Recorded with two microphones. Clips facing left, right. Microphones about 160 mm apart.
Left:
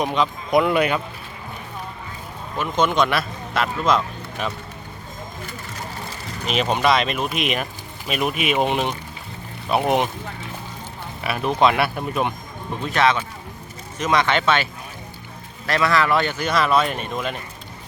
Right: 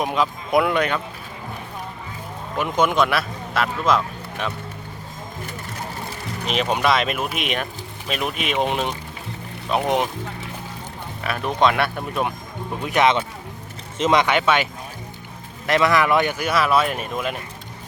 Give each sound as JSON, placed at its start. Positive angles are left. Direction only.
{"t": 0.0, "sound": "speech", "side_deg": 0}
{"t": 0.8, "sound": "speech", "side_deg": 10}
{"t": 2.6, "sound": "speech", "side_deg": -15}
{"t": 6.5, "sound": "speech", "side_deg": 0}
{"t": 11.2, "sound": "speech", "side_deg": 5}
{"t": 12.8, "sound": "speech", "side_deg": -15}